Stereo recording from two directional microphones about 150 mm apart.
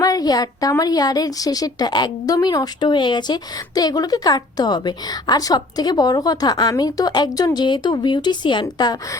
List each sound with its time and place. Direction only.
0.0 s a woman's voice: 25° left (ahead or behind)